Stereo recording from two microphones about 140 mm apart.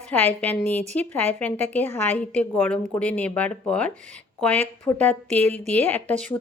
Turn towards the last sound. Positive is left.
turn(degrees=10)  # may be behind; listen again after turning